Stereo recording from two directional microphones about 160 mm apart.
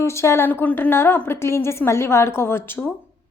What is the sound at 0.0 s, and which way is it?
A woman's voice, 15° left (ahead or behind).